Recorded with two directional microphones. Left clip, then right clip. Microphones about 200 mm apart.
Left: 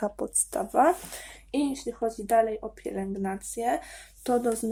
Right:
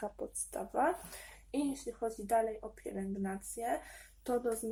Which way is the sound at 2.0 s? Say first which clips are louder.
Left 9 dB; 35° left (ahead or behind).